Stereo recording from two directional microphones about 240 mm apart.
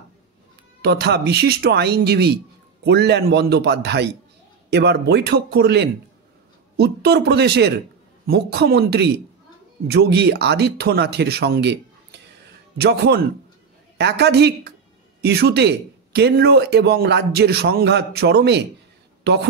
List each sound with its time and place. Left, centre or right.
0.8 s speech: right